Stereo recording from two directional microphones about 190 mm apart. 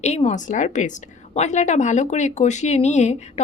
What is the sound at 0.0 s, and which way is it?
Speech, 35° left (ahead or behind).